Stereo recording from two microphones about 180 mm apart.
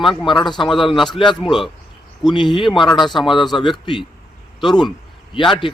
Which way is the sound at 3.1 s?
Centre (ahead or behind).